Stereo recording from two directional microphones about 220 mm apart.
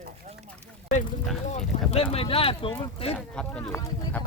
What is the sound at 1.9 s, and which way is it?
Speech, 25° left (ahead or behind).